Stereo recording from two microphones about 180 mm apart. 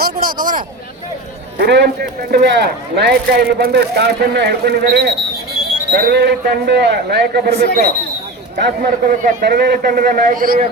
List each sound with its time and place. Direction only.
0.0 s a sound: 55° right (ahead or behind)
1.5 s speech: 65° right (ahead or behind)
8.5 s speech: 55° right (ahead or behind)